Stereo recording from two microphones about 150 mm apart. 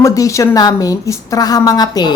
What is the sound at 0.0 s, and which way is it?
Speech, 20° left (ahead or behind).